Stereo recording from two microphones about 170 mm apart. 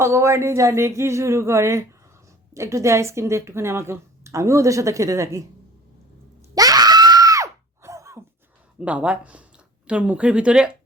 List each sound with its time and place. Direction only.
0.0 s a woman's voice: 15° right (ahead or behind)
6.5 s screaming: 20° right (ahead or behind)
8.8 s a woman's voice: 10° right (ahead or behind)